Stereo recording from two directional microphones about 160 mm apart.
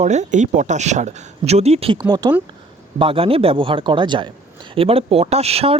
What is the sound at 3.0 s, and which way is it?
Speech, 35° right (ahead or behind).